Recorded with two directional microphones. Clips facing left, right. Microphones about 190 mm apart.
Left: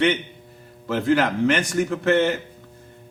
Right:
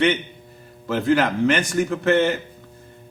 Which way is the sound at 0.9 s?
15° right (ahead or behind).